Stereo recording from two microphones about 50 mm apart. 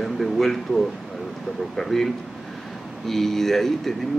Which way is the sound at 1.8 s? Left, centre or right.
Centre.